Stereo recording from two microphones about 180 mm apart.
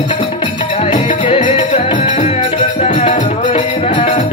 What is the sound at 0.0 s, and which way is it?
Music, 25° left (ahead or behind).